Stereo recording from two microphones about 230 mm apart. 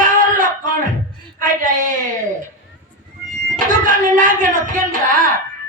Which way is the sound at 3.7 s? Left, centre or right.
Right.